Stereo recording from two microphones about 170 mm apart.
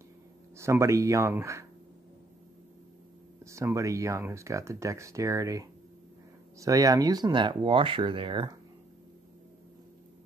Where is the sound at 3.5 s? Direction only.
15° right (ahead or behind).